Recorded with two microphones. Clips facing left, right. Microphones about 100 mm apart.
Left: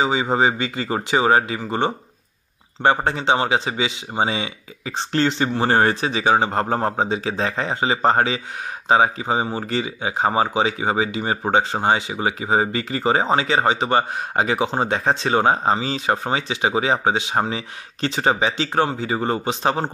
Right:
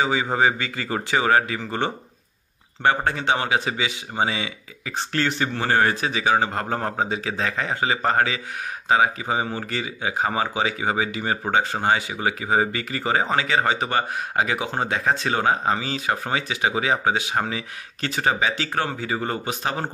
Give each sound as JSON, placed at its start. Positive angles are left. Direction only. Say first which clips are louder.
{"t": 0.0, "sound": "speech", "louder": "left 2 dB", "side_deg": 20}